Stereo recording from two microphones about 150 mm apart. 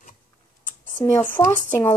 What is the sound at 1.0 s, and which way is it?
Speech, 15° left (ahead or behind).